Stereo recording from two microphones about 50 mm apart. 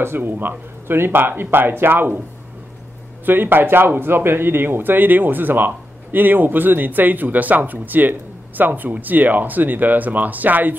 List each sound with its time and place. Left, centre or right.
0.0 s speech: right
3.3 s speech: right